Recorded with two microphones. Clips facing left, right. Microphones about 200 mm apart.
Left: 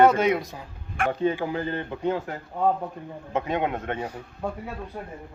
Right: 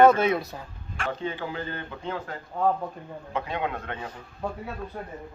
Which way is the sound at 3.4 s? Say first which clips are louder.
Left 6 dB; 20° left (ahead or behind).